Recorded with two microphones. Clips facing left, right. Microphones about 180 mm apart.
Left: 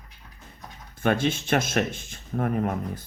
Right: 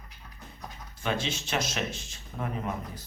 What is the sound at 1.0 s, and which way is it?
Speech, 55° left (ahead or behind).